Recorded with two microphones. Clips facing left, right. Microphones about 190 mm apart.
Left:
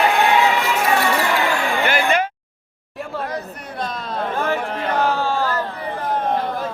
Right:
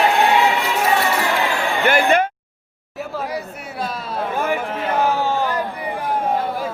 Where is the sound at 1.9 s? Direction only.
50° right (ahead or behind).